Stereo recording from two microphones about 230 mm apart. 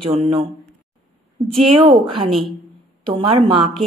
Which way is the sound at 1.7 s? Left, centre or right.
Right.